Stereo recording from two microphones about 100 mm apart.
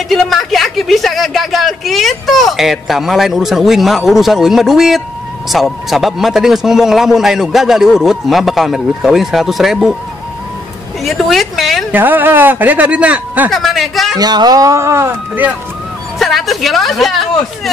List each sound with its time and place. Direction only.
0.1 s speech: centre (ahead or behind)
11.1 s speech: centre (ahead or behind)
11.9 s speech: 20° right (ahead or behind)
13.5 s speech: centre (ahead or behind)
14.1 s speech: 40° right (ahead or behind); by 15.5 s 20° right (ahead or behind)
16.2 s speech: centre (ahead or behind)